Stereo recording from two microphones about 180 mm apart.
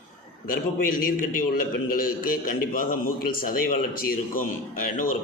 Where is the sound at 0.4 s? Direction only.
50° left (ahead or behind).